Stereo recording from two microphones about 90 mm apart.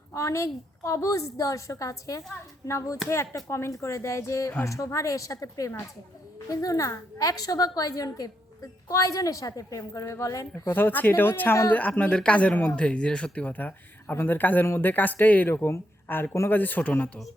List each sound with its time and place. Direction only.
0.1 s a woman's voice: 35° left (ahead or behind)
10.7 s speech: 20° left (ahead or behind)
11.7 s speech: 15° left (ahead or behind)